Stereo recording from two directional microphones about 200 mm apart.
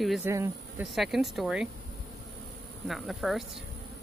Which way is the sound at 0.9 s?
Centre (ahead or behind).